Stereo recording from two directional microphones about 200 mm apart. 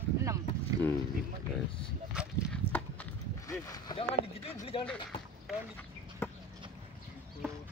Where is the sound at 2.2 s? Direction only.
5° left (ahead or behind).